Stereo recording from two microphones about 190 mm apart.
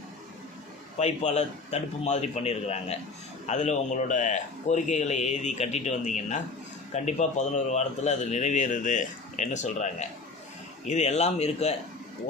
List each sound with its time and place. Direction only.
0.9 s speech: 35° left (ahead or behind)